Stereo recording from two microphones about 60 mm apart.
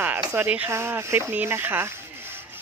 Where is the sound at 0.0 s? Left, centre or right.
Right.